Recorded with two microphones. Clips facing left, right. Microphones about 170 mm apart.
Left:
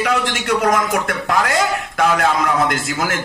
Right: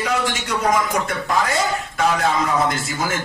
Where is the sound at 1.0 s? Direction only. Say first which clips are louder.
Left 2 dB; 65° left (ahead or behind).